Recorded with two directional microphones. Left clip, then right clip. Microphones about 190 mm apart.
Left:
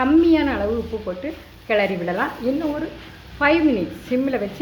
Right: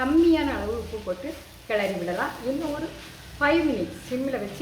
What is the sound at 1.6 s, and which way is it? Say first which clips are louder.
Speech: left 6 dB; 30° left (ahead or behind).